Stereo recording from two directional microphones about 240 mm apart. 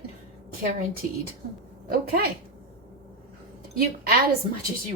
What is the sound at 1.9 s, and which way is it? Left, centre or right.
Speech, right.